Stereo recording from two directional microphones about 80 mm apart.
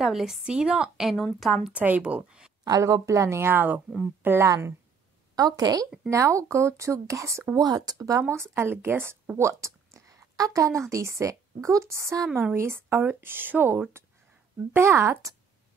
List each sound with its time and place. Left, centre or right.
0.0 s a woman's voice: centre
1.1 s a woman's voice: centre
1.7 s speech: centre
2.6 s a woman's voice: right
5.3 s speech: right
6.0 s speech: right
7.5 s speech: right
8.4 s speech: right